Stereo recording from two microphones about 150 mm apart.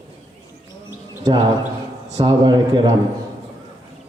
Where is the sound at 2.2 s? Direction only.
25° right (ahead or behind).